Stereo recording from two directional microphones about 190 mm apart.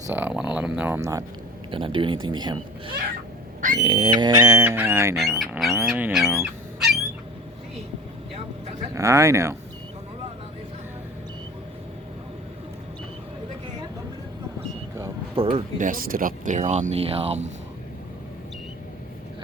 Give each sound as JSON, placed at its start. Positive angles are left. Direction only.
{"t": 0.1, "sound": "bird", "side_deg": -10}
{"t": 1.7, "sound": "speech", "side_deg": -25}
{"t": 3.6, "sound": "a sound", "side_deg": -40}
{"t": 3.9, "sound": "bird", "side_deg": -25}
{"t": 5.1, "sound": "speech", "side_deg": 0}
{"t": 9.0, "sound": "bird", "side_deg": -15}
{"t": 15.4, "sound": "speech", "side_deg": -30}
{"t": 15.8, "sound": "speech", "side_deg": -45}